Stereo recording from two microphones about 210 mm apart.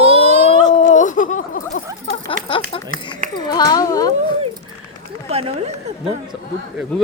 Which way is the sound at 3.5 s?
20° left (ahead or behind).